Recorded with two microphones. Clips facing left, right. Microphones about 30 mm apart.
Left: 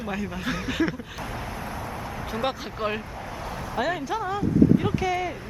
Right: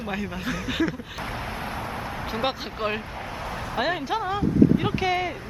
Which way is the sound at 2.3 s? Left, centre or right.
Right.